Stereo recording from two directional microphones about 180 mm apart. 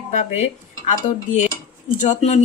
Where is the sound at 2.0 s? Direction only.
40° left (ahead or behind).